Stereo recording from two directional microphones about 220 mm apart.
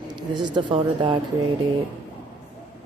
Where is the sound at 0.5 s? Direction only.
20° right (ahead or behind).